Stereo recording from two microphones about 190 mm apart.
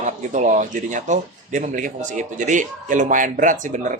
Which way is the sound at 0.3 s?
40° right (ahead or behind).